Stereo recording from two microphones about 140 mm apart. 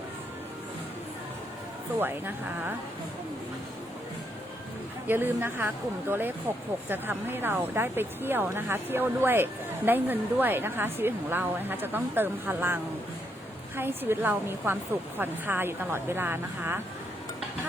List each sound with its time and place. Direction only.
2.0 s speech: 15° right (ahead or behind)
5.0 s speech: 15° right (ahead or behind)